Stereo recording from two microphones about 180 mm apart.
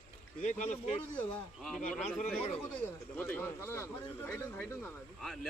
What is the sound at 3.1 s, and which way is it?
Speech, 10° left (ahead or behind).